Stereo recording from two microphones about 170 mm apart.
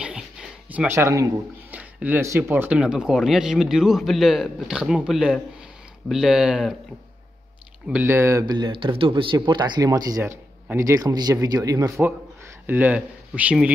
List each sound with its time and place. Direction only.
0.0 s a sound: 5° right (ahead or behind)
1.8 s speech: 10° right (ahead or behind)
7.9 s speech: 15° right (ahead or behind)
12.6 s speech: 10° right (ahead or behind)